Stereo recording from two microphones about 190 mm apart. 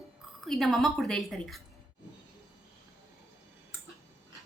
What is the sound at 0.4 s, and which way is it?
A woman's voice, centre (ahead or behind).